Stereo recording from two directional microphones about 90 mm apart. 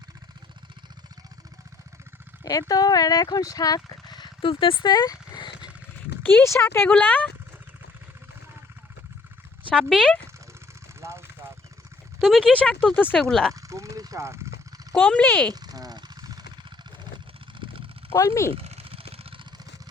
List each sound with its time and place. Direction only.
2.4 s speech: 45° left (ahead or behind)
4.4 s speech: 85° left; by 5.5 s 55° left (ahead or behind)
6.4 s speech: 30° left (ahead or behind)
6.8 s speech: 15° left (ahead or behind)
9.6 s speech: 5° left (ahead or behind)
11.0 s engine: 30° right (ahead or behind)
12.2 s speech: 5° left (ahead or behind)
13.1 s speech: 5° left (ahead or behind)
13.5 s a sound: 35° right (ahead or behind)
14.9 s speech: 15° left (ahead or behind)
15.4 s a sound: 45° right (ahead or behind)
18.1 s speech: 35° left (ahead or behind)
18.5 s a sound: 90° right